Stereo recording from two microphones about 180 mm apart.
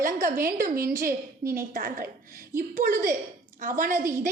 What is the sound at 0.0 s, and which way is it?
A woman's voice, 50° right (ahead or behind).